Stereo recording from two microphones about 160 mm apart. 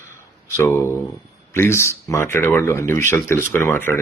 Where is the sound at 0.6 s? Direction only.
15° left (ahead or behind).